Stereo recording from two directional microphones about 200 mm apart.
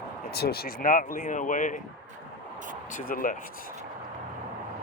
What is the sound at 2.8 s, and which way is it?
Speech, 45° left (ahead or behind).